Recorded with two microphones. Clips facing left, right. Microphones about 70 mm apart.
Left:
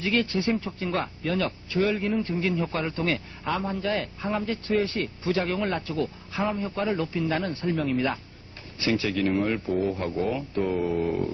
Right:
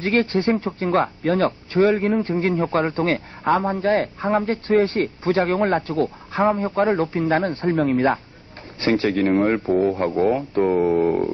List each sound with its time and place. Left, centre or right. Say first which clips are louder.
0.0 s a man's voice: right 6 dB; right